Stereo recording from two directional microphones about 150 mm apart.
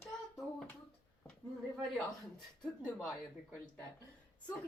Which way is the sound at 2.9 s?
10° left (ahead or behind).